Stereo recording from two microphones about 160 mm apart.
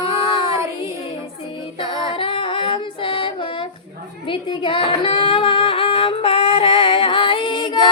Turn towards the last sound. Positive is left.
turn(degrees=30)  # may be behind; listen again after turning